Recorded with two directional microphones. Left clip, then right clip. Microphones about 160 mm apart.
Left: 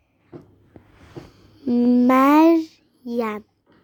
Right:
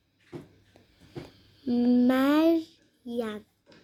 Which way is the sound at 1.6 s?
15° left (ahead or behind).